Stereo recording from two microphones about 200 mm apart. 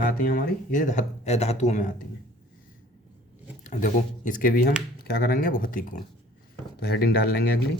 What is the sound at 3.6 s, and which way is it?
Speech, 40° left (ahead or behind).